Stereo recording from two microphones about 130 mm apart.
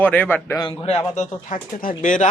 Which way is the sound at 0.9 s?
55° left (ahead or behind).